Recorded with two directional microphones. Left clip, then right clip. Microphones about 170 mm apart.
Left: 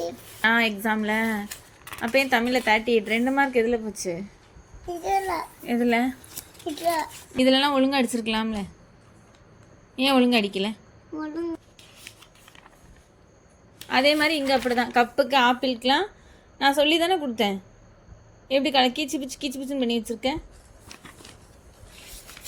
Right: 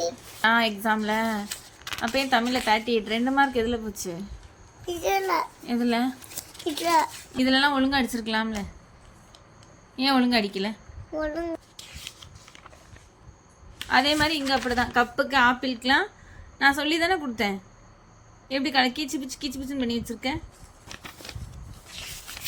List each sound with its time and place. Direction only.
0.4 s a woman's voice: 15° left (ahead or behind)
1.8 s a sound: centre (ahead or behind)
2.1 s a woman's voice: 15° left (ahead or behind)
4.9 s a child's voice: 55° right (ahead or behind)
5.6 s a woman's voice: 15° left (ahead or behind)
7.3 s a woman's voice: 15° left (ahead or behind)
9.9 s a woman's voice: 15° left (ahead or behind)
11.2 s a child's voice: 25° right (ahead or behind)
13.8 s a woman's voice: 10° left (ahead or behind)